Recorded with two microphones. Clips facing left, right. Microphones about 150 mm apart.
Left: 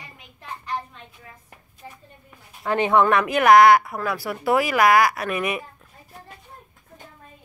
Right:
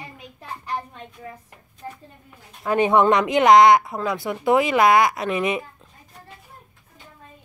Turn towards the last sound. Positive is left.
turn(degrees=-20)  # may be behind; listen again after turning